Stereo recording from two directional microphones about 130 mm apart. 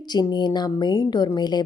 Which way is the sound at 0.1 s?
30° left (ahead or behind).